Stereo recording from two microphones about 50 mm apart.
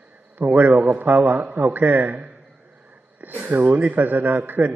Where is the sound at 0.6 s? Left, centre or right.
Right.